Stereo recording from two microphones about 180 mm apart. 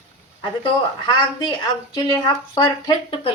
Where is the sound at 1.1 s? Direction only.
25° left (ahead or behind).